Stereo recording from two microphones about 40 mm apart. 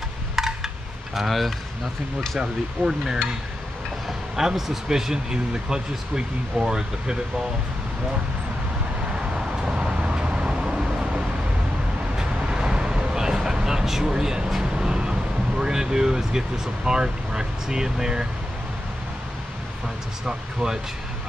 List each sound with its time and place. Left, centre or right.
0.4 s a sound: centre
1.1 s speech: centre
2.8 s stir: left
4.4 s speech: centre
9.8 s vehicle: right
14.6 s speech: centre
20.2 s speech: centre